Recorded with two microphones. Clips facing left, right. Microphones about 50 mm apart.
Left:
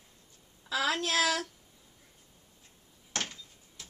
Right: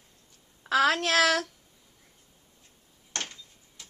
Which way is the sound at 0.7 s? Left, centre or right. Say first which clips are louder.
Right 7 dB; right.